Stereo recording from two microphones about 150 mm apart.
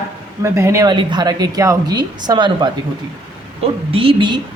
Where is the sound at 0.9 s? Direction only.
30° right (ahead or behind).